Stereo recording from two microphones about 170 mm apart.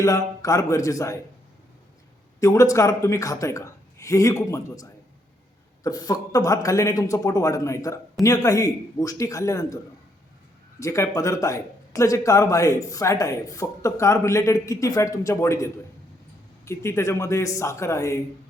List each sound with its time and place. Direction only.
0.0 s speech: 20° left (ahead or behind)
2.4 s speech: 20° left (ahead or behind)
10.8 s speech: 20° left (ahead or behind)